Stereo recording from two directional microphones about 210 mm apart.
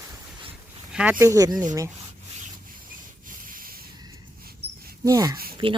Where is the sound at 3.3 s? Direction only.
40° right (ahead or behind).